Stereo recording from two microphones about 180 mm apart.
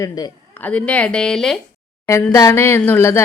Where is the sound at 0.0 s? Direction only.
20° left (ahead or behind).